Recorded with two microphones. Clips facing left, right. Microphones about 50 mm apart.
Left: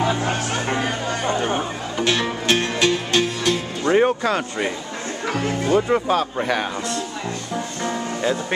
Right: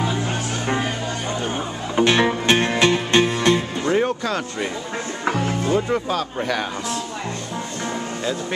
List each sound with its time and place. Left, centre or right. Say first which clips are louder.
1.3 s a sound: left 4 dB; left
2.0 s music: right 5 dB; right
3.8 s music: left 7 dB; centre
5.7 s speech: left 4 dB; centre
7.8 s music: left 3 dB; centre